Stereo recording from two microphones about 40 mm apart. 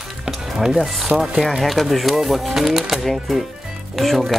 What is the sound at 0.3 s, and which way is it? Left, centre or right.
Speech, centre.